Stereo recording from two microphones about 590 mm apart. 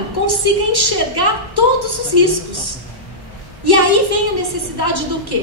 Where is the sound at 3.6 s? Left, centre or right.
Left.